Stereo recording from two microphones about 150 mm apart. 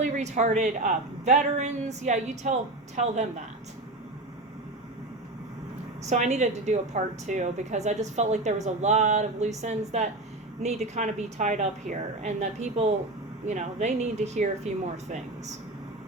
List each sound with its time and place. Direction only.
0.0 s a woman's voice: 50° right (ahead or behind)
6.1 s a woman's voice: 50° right (ahead or behind)